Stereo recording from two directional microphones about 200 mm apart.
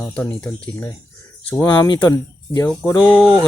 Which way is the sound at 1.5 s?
15° left (ahead or behind).